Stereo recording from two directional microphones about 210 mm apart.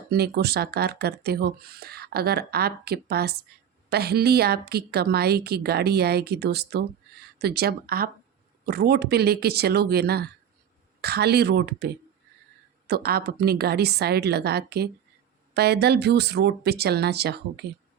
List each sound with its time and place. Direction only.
0.1 s speech: 50° right (ahead or behind)
12.9 s speech: 45° right (ahead or behind)